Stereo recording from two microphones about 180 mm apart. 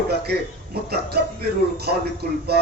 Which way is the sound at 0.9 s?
60° right (ahead or behind).